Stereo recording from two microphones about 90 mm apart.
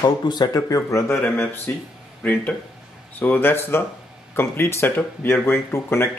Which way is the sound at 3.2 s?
20° left (ahead or behind).